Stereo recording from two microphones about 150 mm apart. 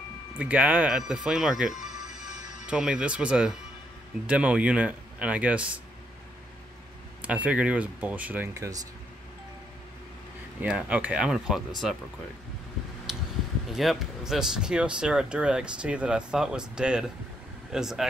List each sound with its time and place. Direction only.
0.4 s speech: 10° right (ahead or behind)
7.2 s speech: 10° right (ahead or behind)
10.6 s speech: 10° right (ahead or behind)
13.1 s a sound: 5° right (ahead or behind)
13.7 s speech: centre (ahead or behind)